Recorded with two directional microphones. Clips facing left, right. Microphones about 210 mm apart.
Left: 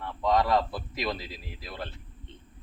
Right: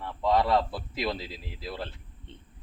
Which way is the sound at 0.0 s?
5° right (ahead or behind).